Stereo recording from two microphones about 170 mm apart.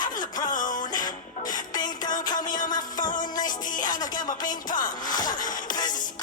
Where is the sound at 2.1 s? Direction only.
50° left (ahead or behind).